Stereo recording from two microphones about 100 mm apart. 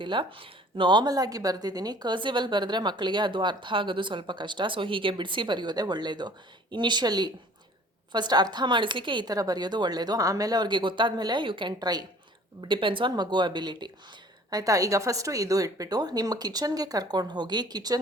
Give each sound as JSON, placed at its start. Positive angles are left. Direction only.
{"t": 0.0, "sound": "speech", "side_deg": -55}
{"t": 12.6, "sound": "speech", "side_deg": -55}
{"t": 14.5, "sound": "a woman's voice", "side_deg": -35}